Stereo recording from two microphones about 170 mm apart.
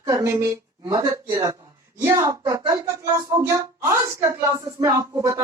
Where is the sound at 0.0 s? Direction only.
20° right (ahead or behind).